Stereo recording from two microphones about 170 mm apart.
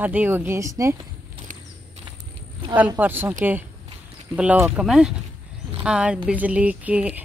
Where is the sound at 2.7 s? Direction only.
10° right (ahead or behind).